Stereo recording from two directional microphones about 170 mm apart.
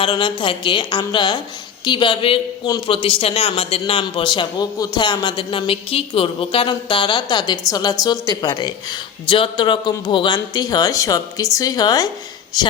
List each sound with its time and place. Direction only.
0.0 s a man's voice: 30° left (ahead or behind)